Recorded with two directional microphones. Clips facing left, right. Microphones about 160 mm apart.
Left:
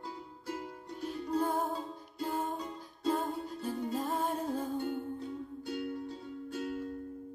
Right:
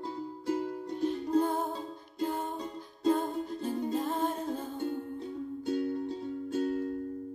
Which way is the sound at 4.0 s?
5° left (ahead or behind).